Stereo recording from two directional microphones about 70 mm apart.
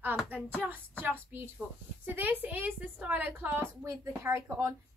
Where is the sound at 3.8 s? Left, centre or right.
Right.